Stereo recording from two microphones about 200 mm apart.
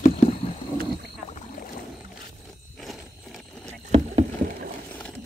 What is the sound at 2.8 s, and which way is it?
Horse, centre (ahead or behind).